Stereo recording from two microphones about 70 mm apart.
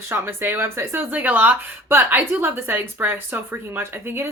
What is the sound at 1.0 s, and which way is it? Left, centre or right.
Speech, right.